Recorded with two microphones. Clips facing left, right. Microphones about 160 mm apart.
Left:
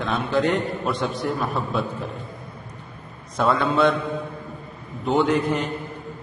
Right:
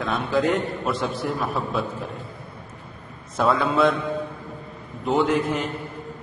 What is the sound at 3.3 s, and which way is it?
Speech, centre (ahead or behind).